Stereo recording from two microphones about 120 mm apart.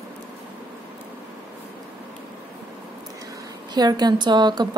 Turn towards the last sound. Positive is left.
turn(degrees=-35)  # may be behind; listen again after turning